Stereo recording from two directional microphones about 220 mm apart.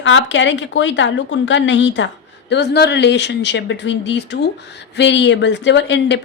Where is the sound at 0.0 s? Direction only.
55° left (ahead or behind).